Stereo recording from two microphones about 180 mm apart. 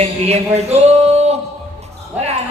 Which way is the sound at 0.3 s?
35° right (ahead or behind).